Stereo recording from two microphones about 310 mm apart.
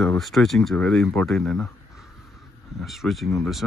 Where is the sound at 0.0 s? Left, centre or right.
Centre.